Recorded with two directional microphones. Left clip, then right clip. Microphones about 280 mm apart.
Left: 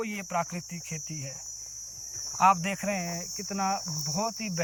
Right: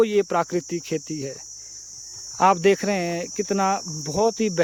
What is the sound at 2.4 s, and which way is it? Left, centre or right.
Speech, right.